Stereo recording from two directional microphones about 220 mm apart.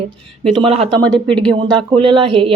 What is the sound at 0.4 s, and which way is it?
Speech, 25° right (ahead or behind).